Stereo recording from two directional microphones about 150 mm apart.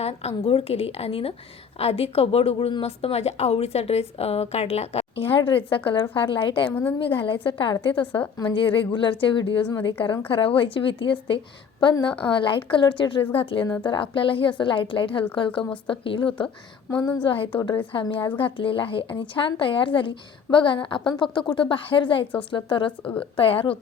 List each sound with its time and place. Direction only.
0.0 s a woman's voice: 45° left (ahead or behind)
6.7 s speech: 15° left (ahead or behind)
7.0 s a woman's voice: 35° left (ahead or behind)
16.9 s a woman's voice: 20° left (ahead or behind)
17.2 s a woman's voice: 35° left (ahead or behind)
22.9 s speech: 10° left (ahead or behind)
23.4 s a woman's voice: 35° left (ahead or behind)